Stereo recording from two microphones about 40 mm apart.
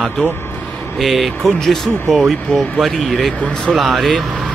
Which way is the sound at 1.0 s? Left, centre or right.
Centre.